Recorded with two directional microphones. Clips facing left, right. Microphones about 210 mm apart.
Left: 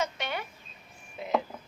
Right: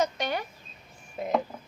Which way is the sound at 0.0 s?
40° right (ahead or behind).